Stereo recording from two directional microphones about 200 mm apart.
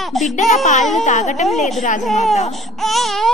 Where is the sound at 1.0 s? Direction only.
35° left (ahead or behind).